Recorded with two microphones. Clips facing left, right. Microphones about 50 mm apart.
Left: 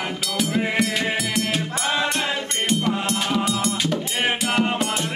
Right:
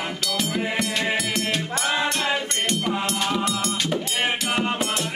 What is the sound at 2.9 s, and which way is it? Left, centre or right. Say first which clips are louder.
Music: left 1 dB; centre.